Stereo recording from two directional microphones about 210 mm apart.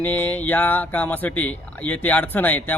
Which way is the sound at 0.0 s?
10° left (ahead or behind).